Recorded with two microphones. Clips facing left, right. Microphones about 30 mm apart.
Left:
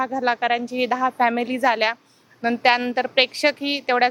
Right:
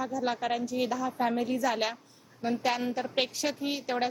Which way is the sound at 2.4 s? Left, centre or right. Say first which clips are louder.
Left 10 dB; left.